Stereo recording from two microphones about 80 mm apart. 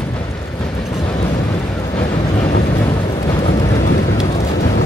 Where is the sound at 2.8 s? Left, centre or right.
Left.